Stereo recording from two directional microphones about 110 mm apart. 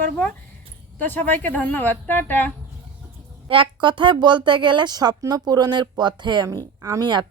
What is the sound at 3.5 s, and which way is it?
Speech, 50° right (ahead or behind).